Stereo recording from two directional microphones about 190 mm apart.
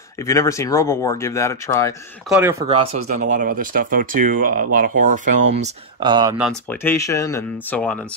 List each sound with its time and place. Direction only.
0.3 s speech: 15° left (ahead or behind)
2.2 s speech: 5° right (ahead or behind)
2.6 s speech: 25° right (ahead or behind)
3.2 s speech: 45° right (ahead or behind)
5.9 s speech: 25° right (ahead or behind)
6.7 s speech: 10° left (ahead or behind)